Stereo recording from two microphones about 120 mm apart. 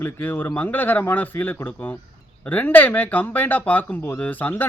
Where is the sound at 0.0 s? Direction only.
15° left (ahead or behind).